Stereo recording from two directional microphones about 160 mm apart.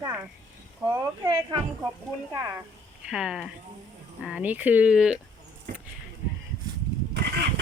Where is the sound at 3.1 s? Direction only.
5° right (ahead or behind).